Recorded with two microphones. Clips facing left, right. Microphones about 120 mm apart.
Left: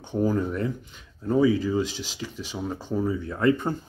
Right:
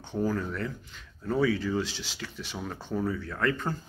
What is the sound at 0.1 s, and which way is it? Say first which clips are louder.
Speech: left 5 dB; 15° left (ahead or behind).